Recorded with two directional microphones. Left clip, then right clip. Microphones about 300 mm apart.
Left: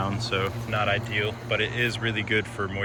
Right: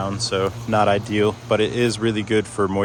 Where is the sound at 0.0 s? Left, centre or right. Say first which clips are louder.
Right 5 dB; centre.